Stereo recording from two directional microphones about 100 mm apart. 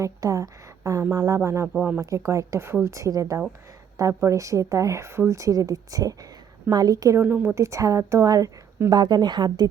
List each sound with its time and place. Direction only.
0.0 s a woman's voice: 35° right (ahead or behind)
7.2 s a woman's voice: 20° right (ahead or behind); by 8.4 s 35° right (ahead or behind)
8.9 s a woman's voice: 45° right (ahead or behind)